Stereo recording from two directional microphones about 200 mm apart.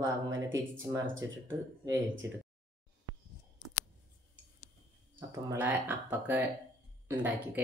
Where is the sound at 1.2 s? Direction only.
65° right (ahead or behind).